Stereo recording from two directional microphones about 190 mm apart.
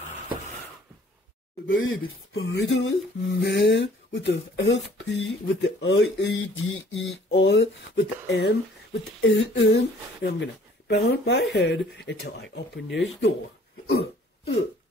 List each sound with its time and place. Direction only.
1.7 s speech: 90° left
3.3 s speech: 65° left (ahead or behind)
13.8 s hiccup: 60° left (ahead or behind)